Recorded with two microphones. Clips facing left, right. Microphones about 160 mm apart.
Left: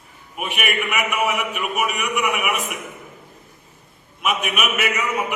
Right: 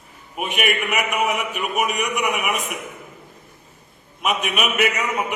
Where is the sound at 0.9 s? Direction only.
40° right (ahead or behind).